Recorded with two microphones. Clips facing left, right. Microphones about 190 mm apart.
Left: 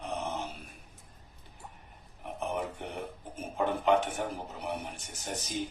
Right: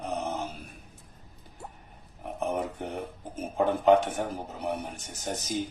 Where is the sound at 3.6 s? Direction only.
40° right (ahead or behind).